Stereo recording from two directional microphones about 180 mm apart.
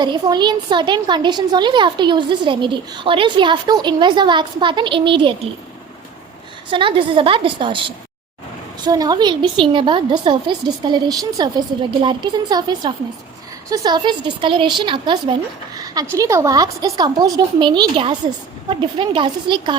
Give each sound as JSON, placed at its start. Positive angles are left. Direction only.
{"t": 0.0, "sound": "a woman's voice", "side_deg": -25}
{"t": 6.7, "sound": "a woman's voice", "side_deg": -30}